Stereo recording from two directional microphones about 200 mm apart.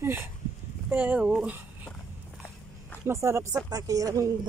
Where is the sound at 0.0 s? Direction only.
10° right (ahead or behind).